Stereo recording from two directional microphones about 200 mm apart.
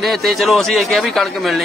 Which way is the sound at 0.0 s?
Centre (ahead or behind).